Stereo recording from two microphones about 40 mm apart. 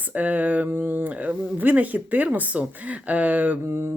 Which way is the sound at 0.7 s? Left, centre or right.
Right.